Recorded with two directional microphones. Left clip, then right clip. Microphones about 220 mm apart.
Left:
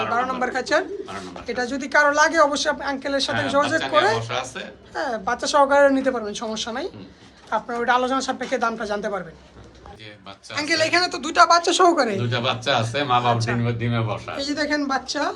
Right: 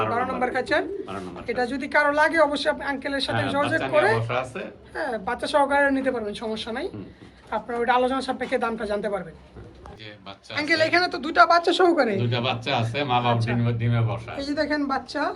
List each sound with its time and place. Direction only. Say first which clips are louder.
0.1 s a woman's voice: left 2 dB; 5° left (ahead or behind)
4.3 s a woman's voice: even; 15° right (ahead or behind)
4.9 s a woman's voice: left 3 dB; 10° left (ahead or behind)
10.5 s a woman's voice: left 1 dB; 10° left (ahead or behind)
12.2 s speech: left 3 dB; 25° left (ahead or behind)
14.3 s a woman's voice: left 1 dB; 5° left (ahead or behind)